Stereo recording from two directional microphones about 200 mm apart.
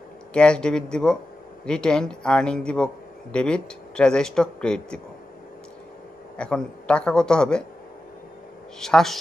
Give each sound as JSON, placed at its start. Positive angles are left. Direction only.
{"t": 0.3, "sound": "a man's voice", "side_deg": 5}
{"t": 6.3, "sound": "a man's voice", "side_deg": 5}
{"t": 8.7, "sound": "a man's voice", "side_deg": 0}